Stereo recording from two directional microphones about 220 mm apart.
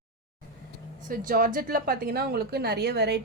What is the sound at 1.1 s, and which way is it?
A woman's voice, 40° right (ahead or behind).